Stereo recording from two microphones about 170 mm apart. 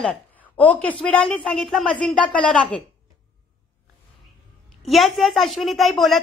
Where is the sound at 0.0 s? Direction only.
10° left (ahead or behind).